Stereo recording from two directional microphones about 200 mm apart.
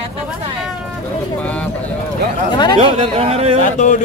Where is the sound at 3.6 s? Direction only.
40° left (ahead or behind).